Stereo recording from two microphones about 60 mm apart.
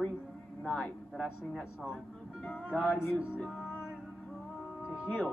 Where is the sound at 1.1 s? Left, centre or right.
Centre.